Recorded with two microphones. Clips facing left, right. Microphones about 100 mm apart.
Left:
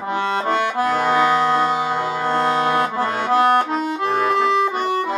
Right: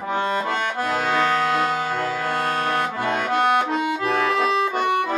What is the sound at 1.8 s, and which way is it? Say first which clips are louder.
Music: left 3 dB; 15° left (ahead or behind).